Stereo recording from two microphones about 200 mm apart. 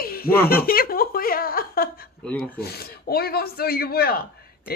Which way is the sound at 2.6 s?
50° left (ahead or behind).